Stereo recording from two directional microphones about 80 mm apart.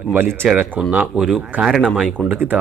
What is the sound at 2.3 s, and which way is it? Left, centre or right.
Speech, right.